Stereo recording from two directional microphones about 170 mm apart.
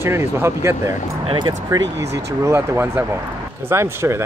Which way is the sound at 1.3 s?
25° right (ahead or behind).